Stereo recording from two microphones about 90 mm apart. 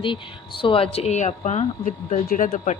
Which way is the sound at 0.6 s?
85° left.